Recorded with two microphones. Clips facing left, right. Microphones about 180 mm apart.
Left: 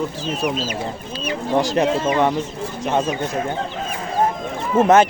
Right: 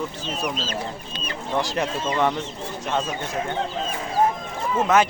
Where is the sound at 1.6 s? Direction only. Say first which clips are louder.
Left 7 dB; 35° left (ahead or behind).